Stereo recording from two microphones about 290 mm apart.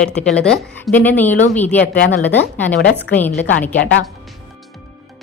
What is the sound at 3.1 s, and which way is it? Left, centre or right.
Speech, centre.